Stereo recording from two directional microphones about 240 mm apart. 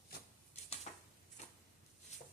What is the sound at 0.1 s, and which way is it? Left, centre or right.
Shuffling cards, left.